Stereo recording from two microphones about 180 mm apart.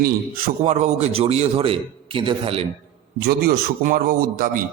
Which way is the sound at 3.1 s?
60° right (ahead or behind).